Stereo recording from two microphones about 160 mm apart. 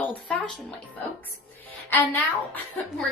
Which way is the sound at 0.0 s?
10° left (ahead or behind).